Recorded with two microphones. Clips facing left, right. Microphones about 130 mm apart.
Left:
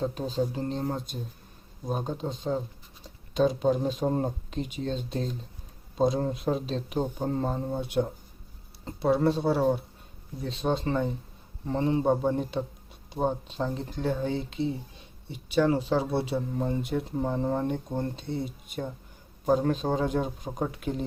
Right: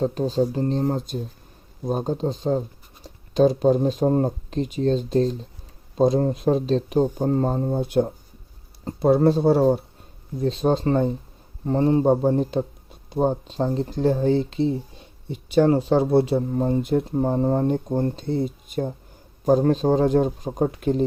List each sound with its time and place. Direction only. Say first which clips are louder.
0.0 s speech: right 7 dB; 40° right (ahead or behind)